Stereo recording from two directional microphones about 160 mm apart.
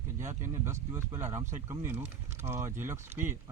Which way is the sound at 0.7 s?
15° right (ahead or behind).